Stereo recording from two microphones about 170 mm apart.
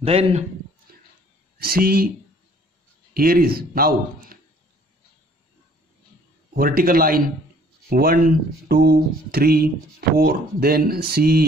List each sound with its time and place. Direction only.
0.0 s speech: 40° right (ahead or behind)
1.6 s speech: 60° right (ahead or behind)
3.2 s speech: 60° right (ahead or behind)
6.5 s speech: 60° right (ahead or behind)